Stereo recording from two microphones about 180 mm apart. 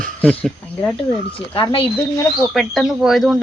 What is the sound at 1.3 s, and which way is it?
Speech, 30° left (ahead or behind).